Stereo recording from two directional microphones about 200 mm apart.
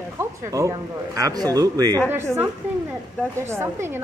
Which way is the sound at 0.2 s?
15° right (ahead or behind).